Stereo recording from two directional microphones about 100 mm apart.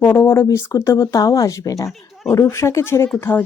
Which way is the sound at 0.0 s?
20° left (ahead or behind).